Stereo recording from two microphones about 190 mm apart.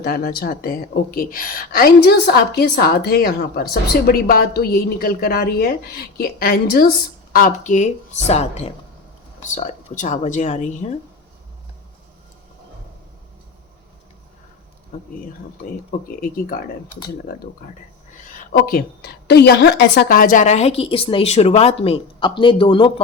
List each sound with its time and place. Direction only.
0.0 s a woman's voice: 55° left (ahead or behind); by 10.9 s 35° left (ahead or behind)
18.5 s a woman's voice: 50° left (ahead or behind); by 22.9 s 25° left (ahead or behind)